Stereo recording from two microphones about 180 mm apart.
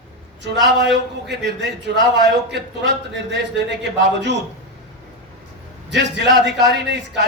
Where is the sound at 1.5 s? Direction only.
70° right (ahead or behind).